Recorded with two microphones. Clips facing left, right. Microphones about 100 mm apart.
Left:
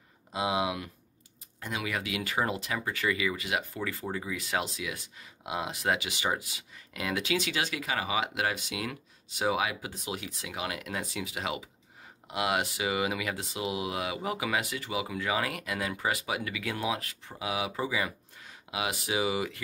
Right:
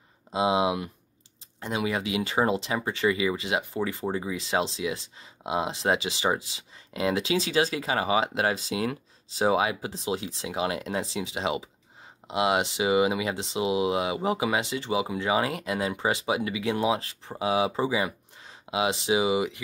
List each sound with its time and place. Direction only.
0.3 s speech: 25° right (ahead or behind)